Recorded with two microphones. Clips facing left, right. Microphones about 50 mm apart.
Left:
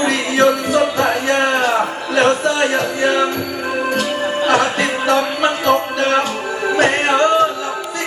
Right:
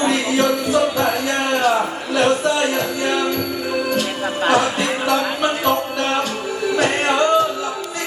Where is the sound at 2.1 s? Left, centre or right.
Left.